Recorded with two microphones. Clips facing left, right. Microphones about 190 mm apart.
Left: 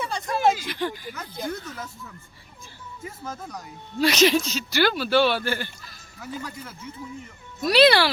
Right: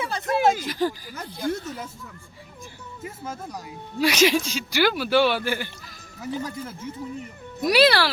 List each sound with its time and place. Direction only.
0.0 s a sound: 5° right (ahead or behind)
0.5 s speech: 40° right (ahead or behind)
1.5 s speech: 20° right (ahead or behind)
3.0 s speech: 10° right (ahead or behind)
6.3 s speech: 30° right (ahead or behind)
7.6 s speech: 10° right (ahead or behind)